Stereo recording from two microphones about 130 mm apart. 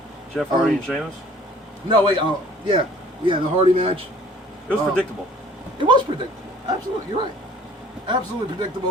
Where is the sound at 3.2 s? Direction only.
40° right (ahead or behind).